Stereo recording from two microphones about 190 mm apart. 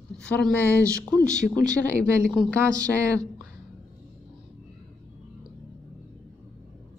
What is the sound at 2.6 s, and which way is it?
Speech, 20° right (ahead or behind).